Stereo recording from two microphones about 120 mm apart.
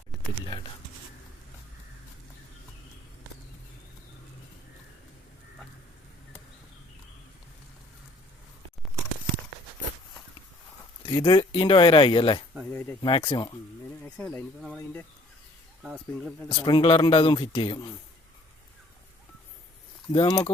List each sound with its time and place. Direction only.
0.1 s a sound: centre (ahead or behind)
11.0 s speech: 35° left (ahead or behind)
14.0 s a sound: 10° left (ahead or behind)
15.8 s speech: 5° right (ahead or behind)
16.5 s speech: 45° left (ahead or behind)
20.1 s speech: 40° left (ahead or behind)